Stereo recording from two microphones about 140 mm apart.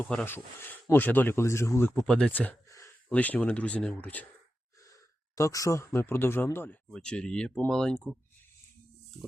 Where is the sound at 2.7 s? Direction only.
25° left (ahead or behind).